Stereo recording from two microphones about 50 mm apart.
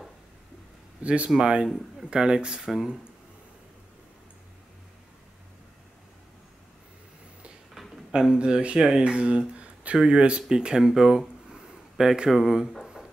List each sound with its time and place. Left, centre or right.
1.0 s speech: right; by 3.0 s centre
7.7 s a sound: centre
8.1 s speech: centre